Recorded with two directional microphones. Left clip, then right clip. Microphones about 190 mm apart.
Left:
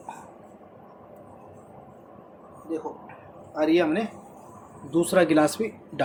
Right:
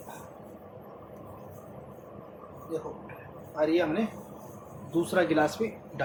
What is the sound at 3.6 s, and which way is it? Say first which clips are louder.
Speech: left 4 dB; 50° left (ahead or behind).